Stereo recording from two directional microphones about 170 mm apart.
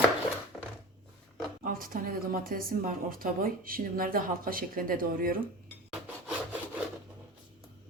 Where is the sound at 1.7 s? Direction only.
55° right (ahead or behind).